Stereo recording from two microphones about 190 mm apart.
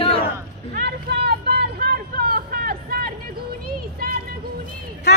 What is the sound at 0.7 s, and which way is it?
Vehicle, 60° right (ahead or behind).